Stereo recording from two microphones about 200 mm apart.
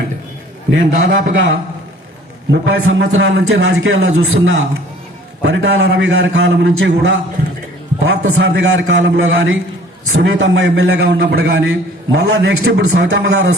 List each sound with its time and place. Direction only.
0.7 s a man's voice: 65° right (ahead or behind)
10.2 s a man's voice: 65° right (ahead or behind)